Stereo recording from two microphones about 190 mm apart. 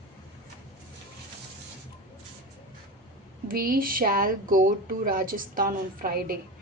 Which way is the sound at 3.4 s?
50° right (ahead or behind).